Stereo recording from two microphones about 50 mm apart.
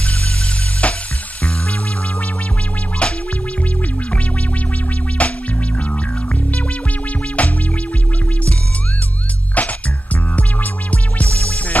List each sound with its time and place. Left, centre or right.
0.8 s music: left
3.0 s music: left
5.2 s music: left
7.4 s music: left
9.6 s music: left